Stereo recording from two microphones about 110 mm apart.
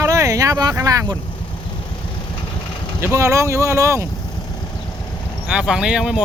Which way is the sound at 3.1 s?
25° right (ahead or behind).